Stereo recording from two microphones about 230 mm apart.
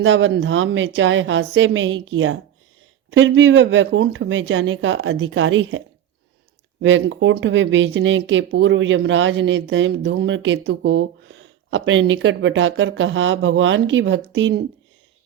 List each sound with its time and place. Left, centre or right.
0.0 s speech: right
6.8 s speech: right